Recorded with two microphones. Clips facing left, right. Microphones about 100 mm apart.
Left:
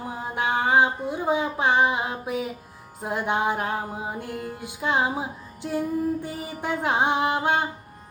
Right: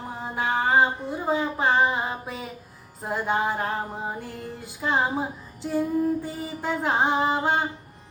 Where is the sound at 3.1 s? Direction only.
15° left (ahead or behind).